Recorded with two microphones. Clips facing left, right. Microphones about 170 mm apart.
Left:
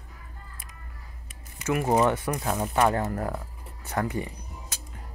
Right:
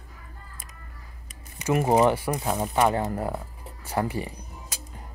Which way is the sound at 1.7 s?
30° right (ahead or behind).